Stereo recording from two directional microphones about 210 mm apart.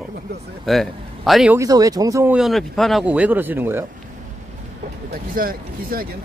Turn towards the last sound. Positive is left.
turn(degrees=-45)  # may be behind; listen again after turning